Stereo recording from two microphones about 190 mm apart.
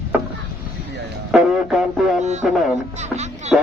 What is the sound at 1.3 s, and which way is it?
Speech, 5° right (ahead or behind).